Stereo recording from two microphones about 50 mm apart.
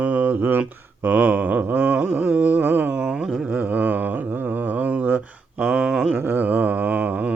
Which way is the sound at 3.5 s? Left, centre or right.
Right.